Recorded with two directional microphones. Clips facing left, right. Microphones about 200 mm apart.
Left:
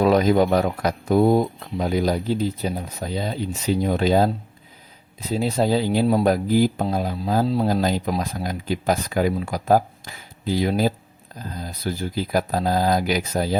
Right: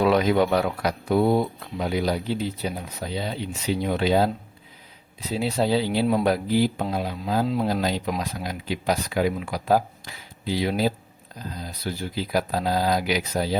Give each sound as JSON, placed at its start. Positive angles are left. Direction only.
{"t": 0.0, "sound": "speech", "side_deg": 40}
{"t": 5.3, "sound": "speech", "side_deg": 45}